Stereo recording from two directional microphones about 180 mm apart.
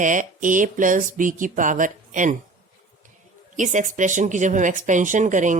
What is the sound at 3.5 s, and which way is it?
Speech, 45° right (ahead or behind).